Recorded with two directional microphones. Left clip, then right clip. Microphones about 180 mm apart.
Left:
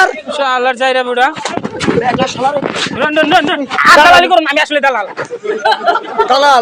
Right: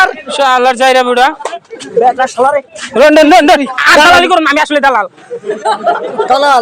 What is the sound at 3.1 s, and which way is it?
A man's voice, 65° right (ahead or behind).